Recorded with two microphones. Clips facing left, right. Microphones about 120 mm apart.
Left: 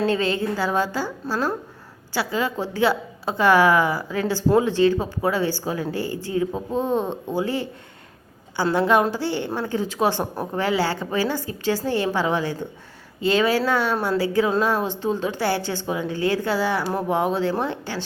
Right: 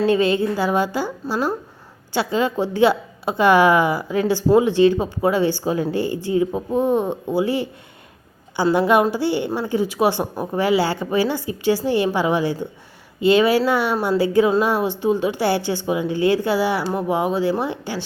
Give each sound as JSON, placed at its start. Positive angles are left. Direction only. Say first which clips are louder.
{"t": 0.1, "sound": "a woman's voice", "louder": "right 5 dB", "side_deg": -15}
{"t": 8.7, "sound": "a woman's voice", "louder": "right 2 dB", "side_deg": -15}